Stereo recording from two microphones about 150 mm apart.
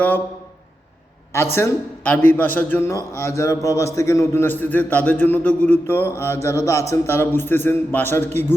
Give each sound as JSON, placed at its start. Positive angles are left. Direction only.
{"t": 1.5, "sound": "a man's voice", "side_deg": 15}